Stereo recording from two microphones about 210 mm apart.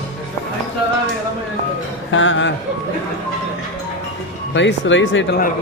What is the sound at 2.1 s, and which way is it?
Speech, 65° left (ahead or behind).